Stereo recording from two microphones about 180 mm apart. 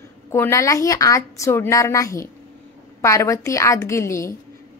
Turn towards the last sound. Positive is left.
turn(degrees=15)  # may be behind; listen again after turning